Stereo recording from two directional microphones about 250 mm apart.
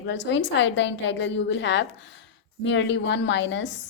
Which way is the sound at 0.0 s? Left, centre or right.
Left.